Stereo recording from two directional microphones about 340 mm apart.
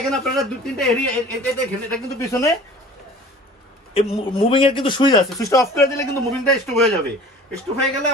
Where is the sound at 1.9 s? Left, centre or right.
Centre.